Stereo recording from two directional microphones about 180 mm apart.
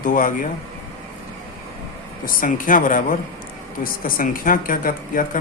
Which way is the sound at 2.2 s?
50° left (ahead or behind).